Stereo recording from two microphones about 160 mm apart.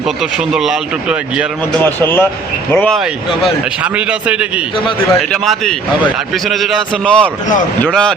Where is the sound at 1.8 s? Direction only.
10° left (ahead or behind).